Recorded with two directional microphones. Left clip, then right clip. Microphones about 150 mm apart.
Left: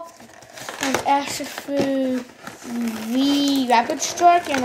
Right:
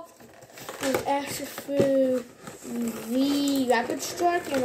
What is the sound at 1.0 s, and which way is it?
Speech, 5° right (ahead or behind).